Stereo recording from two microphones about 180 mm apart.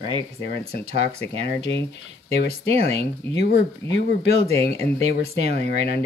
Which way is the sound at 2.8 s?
35° right (ahead or behind).